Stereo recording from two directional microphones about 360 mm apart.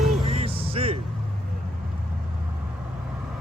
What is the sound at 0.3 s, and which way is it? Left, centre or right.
Music, centre.